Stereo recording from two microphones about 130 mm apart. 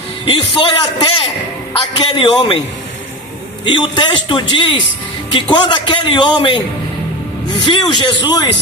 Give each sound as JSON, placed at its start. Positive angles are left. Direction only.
{"t": 0.3, "sound": "a man's voice", "side_deg": 40}
{"t": 3.7, "sound": "a man's voice", "side_deg": 35}
{"t": 7.6, "sound": "a man's voice", "side_deg": 40}